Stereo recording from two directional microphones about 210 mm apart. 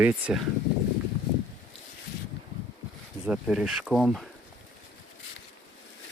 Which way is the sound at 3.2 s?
Centre (ahead or behind).